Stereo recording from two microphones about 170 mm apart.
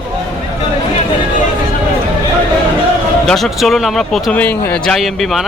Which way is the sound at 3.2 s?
Centre (ahead or behind).